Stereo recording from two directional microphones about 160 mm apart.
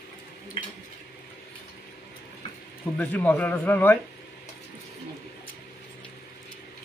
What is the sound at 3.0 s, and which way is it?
A man's voice, 10° left (ahead or behind).